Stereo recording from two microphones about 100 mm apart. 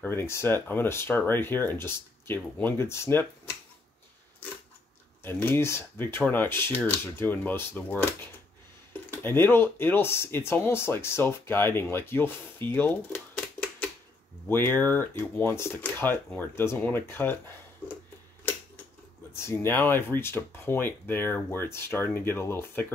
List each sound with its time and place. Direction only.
0.0 s speech: 25° left (ahead or behind)
5.2 s speech: 20° left (ahead or behind)
9.1 s speech: 20° left (ahead or behind)
14.5 s speech: 20° left (ahead or behind)
19.3 s speech: 25° left (ahead or behind)